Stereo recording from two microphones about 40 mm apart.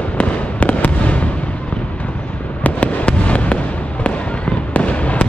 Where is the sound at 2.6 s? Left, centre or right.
Left.